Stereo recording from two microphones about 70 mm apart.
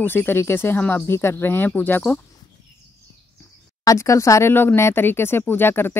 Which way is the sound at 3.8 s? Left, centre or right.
Left.